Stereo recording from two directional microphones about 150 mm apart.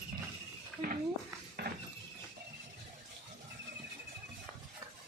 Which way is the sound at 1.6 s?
90° right.